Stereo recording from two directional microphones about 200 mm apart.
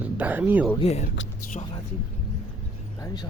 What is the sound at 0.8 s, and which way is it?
Speech, 30° left (ahead or behind).